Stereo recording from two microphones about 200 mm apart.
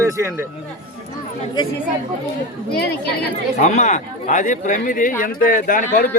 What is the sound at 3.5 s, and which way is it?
Speech, 35° left (ahead or behind).